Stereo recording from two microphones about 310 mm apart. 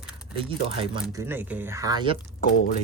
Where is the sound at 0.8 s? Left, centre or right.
Centre.